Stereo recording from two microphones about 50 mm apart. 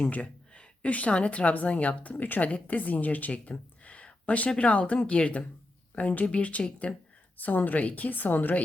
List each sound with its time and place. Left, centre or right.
0.0 s a woman's voice: left
7.3 s a woman's voice: left